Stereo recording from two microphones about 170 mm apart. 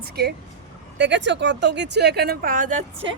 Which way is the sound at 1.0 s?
90° right.